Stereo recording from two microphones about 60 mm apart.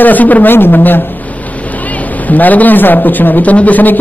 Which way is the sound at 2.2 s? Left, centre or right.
Left.